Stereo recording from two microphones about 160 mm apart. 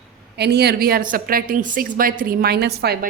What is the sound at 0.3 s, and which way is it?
A woman's voice, 90° right.